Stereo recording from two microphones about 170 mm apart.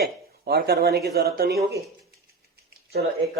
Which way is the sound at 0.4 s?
65° right (ahead or behind).